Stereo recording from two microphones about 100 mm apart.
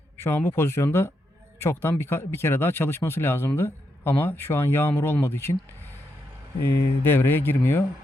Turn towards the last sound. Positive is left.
turn(degrees=25)  # may be behind; listen again after turning